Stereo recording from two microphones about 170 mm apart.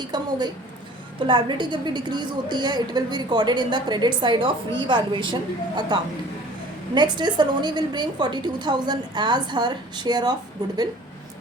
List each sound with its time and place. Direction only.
0.1 s a woman's voice: 25° right (ahead or behind)